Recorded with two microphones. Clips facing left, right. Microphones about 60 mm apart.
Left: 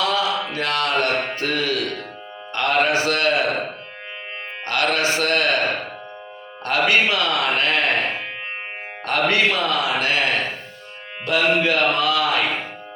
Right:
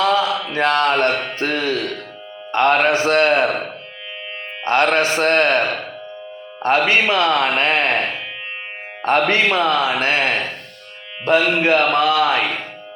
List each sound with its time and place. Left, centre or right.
0.0 s mantra: right
1.4 s speech: right
4.6 s speech: right
9.0 s speech: right